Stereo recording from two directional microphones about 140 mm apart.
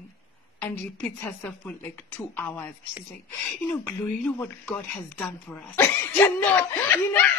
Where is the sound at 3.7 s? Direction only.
15° left (ahead or behind).